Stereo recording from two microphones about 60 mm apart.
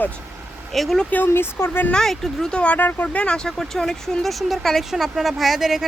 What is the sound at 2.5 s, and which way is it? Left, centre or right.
Speech, left.